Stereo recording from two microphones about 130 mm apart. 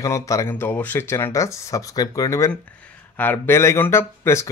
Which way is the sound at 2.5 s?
10° left (ahead or behind).